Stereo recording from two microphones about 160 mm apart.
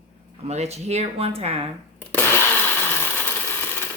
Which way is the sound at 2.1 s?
10° left (ahead or behind).